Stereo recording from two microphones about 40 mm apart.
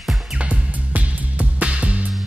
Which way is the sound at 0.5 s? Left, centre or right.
Right.